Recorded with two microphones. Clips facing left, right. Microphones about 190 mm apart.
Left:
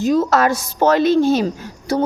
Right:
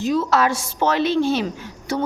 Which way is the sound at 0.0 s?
45° left (ahead or behind).